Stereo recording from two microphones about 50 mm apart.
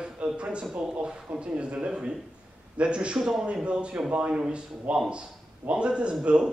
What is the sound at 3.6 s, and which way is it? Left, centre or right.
A man's voice, right.